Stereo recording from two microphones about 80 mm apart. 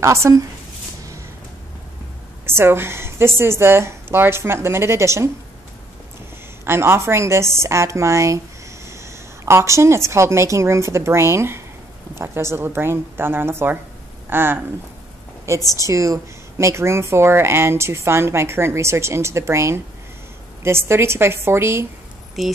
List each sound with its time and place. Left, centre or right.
0.0 s speech: right
2.4 s speech: right
6.6 s a woman's voice: right
15.7 s speech: right
22.4 s speech: centre